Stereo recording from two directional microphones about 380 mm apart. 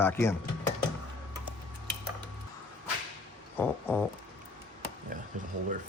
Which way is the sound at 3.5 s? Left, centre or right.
Centre.